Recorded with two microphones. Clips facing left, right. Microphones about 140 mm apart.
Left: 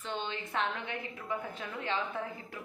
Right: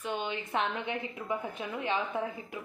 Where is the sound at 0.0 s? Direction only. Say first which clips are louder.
Right 3 dB; 10° right (ahead or behind).